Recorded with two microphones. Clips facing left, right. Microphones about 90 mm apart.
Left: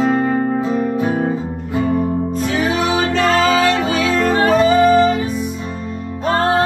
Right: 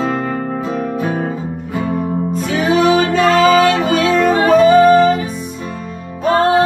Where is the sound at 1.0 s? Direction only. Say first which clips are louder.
Left 1 dB; 20° left (ahead or behind).